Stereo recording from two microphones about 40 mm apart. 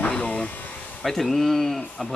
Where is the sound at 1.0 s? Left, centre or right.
Centre.